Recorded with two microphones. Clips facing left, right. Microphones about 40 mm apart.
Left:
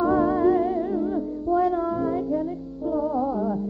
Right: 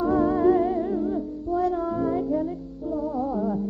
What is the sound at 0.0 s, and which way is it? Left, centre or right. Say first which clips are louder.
Music: left 1 dB; centre.